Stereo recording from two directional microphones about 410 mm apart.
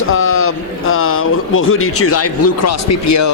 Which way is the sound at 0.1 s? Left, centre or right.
Left.